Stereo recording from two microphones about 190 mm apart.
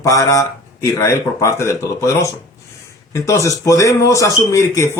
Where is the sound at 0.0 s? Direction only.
15° left (ahead or behind).